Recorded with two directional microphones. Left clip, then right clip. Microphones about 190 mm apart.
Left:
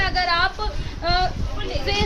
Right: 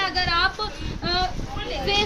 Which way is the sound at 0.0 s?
40° left (ahead or behind).